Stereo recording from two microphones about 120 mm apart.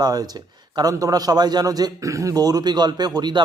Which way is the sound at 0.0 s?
30° right (ahead or behind).